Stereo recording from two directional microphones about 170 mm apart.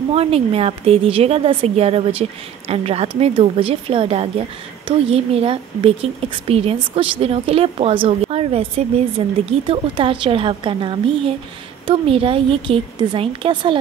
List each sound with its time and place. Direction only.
0.1 s a woman's voice: 35° right (ahead or behind)